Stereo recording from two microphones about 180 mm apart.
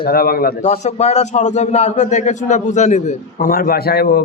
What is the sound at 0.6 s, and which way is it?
A man's voice, 35° left (ahead or behind).